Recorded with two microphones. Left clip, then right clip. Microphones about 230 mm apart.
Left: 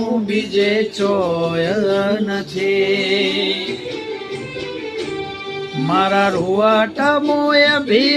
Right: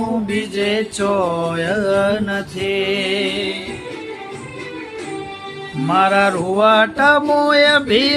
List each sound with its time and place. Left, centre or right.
0.6 s music: right
5.9 s music: centre